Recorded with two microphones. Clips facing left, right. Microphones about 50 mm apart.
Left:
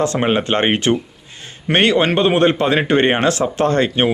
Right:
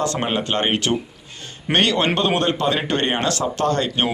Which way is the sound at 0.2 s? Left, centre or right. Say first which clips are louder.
Left 5 dB; left.